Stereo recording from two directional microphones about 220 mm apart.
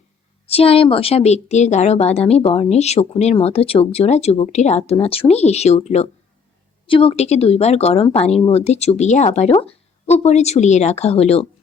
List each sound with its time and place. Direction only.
0.4 s speech: 25° left (ahead or behind)